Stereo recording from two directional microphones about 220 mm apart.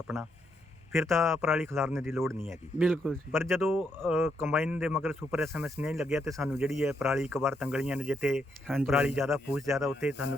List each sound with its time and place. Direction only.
0.1 s speech: 30° left (ahead or behind)
1.0 s speech: centre (ahead or behind)
6.3 s speech: 10° right (ahead or behind)
6.7 s speech: centre (ahead or behind)